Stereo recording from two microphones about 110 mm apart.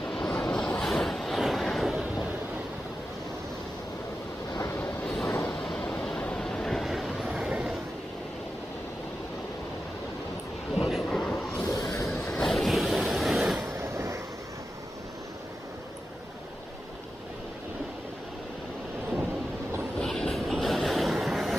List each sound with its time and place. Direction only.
0.1 s vehicle: 10° left (ahead or behind)
5.0 s train: centre (ahead or behind)
5.5 s vehicle: 5° left (ahead or behind)
10.8 s vehicle: centre (ahead or behind)
11.7 s waves: centre (ahead or behind)
13.7 s a sound: 25° right (ahead or behind)
20.0 s vehicle: 5° left (ahead or behind)